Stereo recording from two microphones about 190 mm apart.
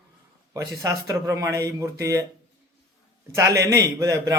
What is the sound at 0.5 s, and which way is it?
A man's voice, 15° right (ahead or behind).